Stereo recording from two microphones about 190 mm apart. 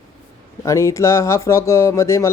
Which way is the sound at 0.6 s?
15° left (ahead or behind).